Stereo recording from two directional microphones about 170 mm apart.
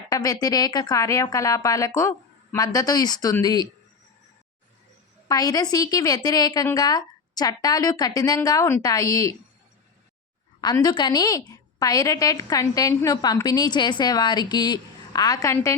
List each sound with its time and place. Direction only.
0.1 s a woman's voice: 20° left (ahead or behind)
5.3 s a woman's voice: 20° left (ahead or behind)
10.6 s a woman's voice: 25° left (ahead or behind)